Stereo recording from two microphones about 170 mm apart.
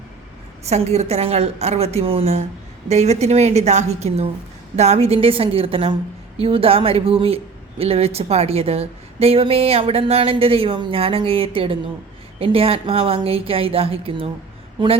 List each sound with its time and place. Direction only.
0.7 s a woman's voice: 40° right (ahead or behind)